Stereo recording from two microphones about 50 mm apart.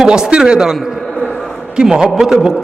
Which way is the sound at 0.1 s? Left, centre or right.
Centre.